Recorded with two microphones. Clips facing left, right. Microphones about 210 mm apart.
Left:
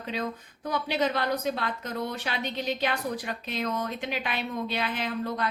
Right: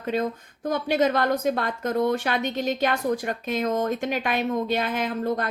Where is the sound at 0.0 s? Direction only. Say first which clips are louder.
Right 7 dB; 50° right (ahead or behind).